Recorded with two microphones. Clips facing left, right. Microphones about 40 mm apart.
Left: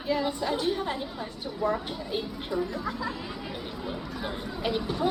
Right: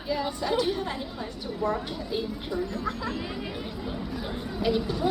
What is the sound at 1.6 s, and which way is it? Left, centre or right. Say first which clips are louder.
Speech: even; centre.